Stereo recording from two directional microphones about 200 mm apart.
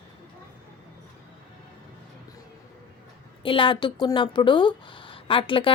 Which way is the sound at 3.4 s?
25° left (ahead or behind).